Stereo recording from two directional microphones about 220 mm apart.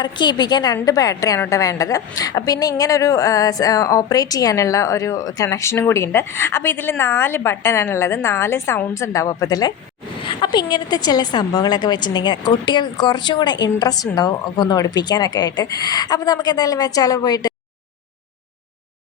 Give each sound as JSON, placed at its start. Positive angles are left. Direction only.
{"t": 0.0, "sound": "a woman's voice", "side_deg": 20}